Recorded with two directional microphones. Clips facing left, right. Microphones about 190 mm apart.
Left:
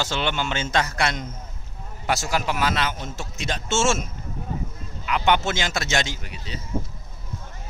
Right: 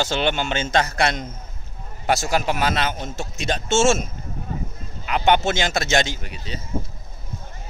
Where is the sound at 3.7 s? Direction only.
60° right (ahead or behind).